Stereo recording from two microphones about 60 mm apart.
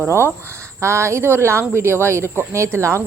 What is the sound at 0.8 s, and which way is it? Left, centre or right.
A woman's voice, right.